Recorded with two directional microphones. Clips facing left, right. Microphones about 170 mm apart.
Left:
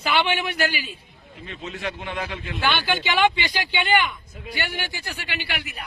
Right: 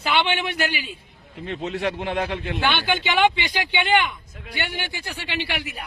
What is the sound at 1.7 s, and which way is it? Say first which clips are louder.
Speech: right 5 dB; 35° right (ahead or behind).